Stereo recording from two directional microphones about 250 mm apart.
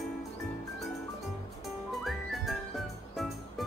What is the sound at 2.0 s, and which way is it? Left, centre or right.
Music, centre.